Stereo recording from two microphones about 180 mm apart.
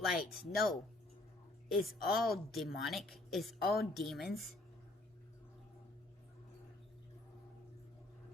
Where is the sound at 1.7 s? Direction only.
Centre (ahead or behind).